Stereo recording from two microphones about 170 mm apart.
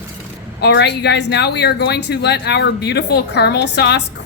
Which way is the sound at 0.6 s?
85° left.